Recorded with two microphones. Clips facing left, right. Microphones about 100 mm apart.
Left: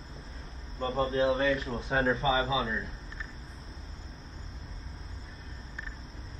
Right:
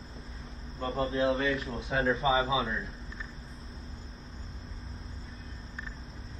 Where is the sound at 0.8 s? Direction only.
Centre (ahead or behind).